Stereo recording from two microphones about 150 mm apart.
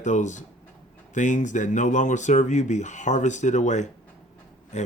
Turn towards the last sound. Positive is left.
turn(degrees=50)  # may be behind; listen again after turning